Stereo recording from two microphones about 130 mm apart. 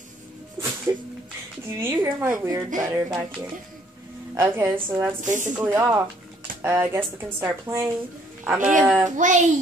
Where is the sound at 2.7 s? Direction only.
25° right (ahead or behind).